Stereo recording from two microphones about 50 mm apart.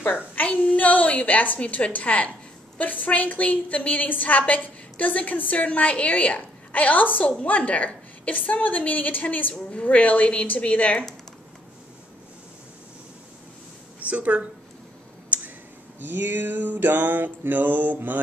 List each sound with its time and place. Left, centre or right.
0.0 s child singing: left
0.5 s a woman's voice: left
9.5 s a woman's voice: left
14.1 s speech: right
15.2 s a sound: right